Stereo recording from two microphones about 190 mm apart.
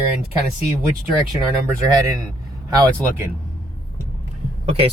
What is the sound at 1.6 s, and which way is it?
Speech, 20° right (ahead or behind).